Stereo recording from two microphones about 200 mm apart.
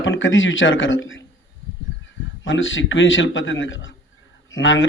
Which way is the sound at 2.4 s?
70° left (ahead or behind).